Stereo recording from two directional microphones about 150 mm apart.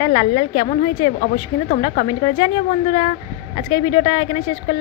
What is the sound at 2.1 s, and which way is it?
Speech, 35° left (ahead or behind).